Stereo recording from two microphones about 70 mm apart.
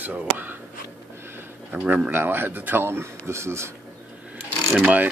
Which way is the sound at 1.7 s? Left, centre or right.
Right.